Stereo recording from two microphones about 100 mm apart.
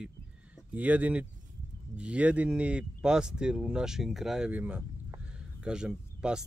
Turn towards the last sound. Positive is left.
turn(degrees=-10)  # may be behind; listen again after turning